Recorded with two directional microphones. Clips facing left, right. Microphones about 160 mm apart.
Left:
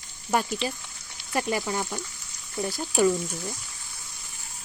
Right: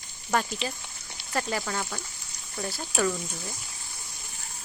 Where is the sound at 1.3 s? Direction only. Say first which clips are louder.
Left 3 dB; 15° left (ahead or behind).